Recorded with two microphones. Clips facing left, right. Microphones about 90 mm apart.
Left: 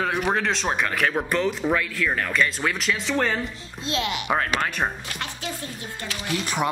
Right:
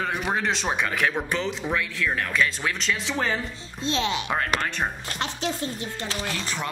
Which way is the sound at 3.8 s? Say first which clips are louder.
Right 1 dB; 30° right (ahead or behind).